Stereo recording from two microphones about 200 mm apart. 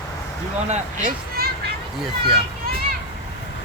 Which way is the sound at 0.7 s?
40° right (ahead or behind).